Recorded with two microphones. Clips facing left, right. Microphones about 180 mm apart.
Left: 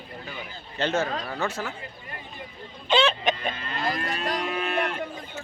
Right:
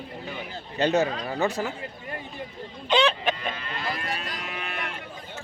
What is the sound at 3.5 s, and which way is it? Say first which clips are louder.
Cattle: left 3 dB; 40° left (ahead or behind).